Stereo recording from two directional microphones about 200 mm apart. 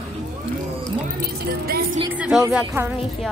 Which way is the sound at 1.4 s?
50° right (ahead or behind).